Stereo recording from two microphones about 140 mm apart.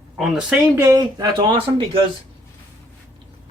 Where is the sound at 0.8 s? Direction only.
25° right (ahead or behind).